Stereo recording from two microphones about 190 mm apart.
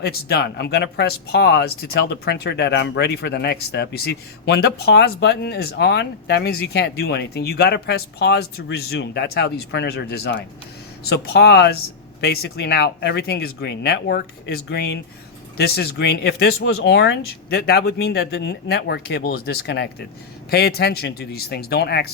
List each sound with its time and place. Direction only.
0.0 s speech: 55° left (ahead or behind)